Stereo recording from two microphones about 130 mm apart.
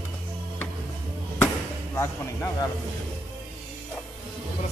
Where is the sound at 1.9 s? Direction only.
20° left (ahead or behind).